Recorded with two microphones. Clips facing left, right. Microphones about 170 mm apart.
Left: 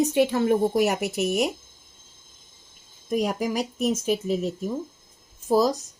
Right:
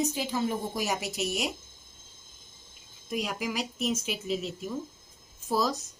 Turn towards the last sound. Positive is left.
turn(degrees=40)  # may be behind; listen again after turning